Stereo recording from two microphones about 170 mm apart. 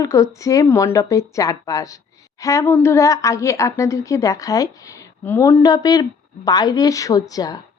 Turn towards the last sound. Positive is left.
turn(degrees=20)  # may be behind; listen again after turning